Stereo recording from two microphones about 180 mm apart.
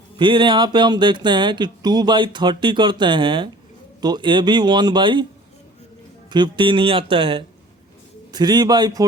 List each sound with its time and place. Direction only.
0.2 s speech: 25° right (ahead or behind)
6.3 s speech: 25° right (ahead or behind)